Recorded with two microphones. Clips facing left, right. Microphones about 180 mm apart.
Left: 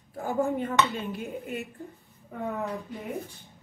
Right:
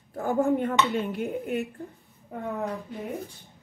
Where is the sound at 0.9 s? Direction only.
60° right (ahead or behind).